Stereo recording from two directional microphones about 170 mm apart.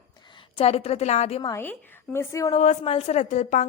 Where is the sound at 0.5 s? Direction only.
35° left (ahead or behind).